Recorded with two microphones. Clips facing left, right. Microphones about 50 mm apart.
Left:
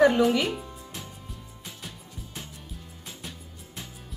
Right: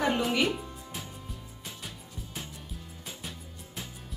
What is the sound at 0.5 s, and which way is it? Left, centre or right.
Music, centre.